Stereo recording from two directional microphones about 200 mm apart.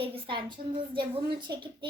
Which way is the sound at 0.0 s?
25° right (ahead or behind).